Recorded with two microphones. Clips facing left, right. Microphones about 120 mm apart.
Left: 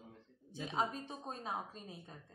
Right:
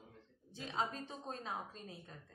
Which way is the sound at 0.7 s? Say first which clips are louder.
Left 2 dB; 15° left (ahead or behind).